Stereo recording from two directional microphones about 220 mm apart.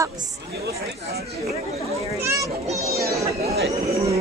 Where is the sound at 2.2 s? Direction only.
15° right (ahead or behind).